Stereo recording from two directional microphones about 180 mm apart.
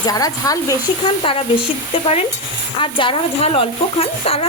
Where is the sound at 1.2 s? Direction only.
30° left (ahead or behind).